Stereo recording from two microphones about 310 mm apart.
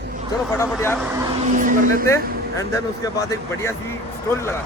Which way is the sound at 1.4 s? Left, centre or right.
Right.